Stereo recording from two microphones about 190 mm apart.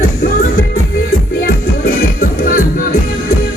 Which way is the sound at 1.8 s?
45° left (ahead or behind).